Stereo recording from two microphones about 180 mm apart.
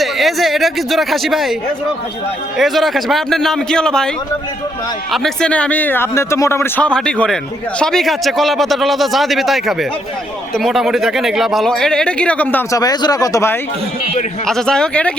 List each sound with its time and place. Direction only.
0.0 s speech: centre (ahead or behind)
2.6 s speech: centre (ahead or behind)
5.1 s a man's voice: 5° left (ahead or behind)
12.8 s speech: 20° left (ahead or behind)
14.4 s speech: 5° left (ahead or behind)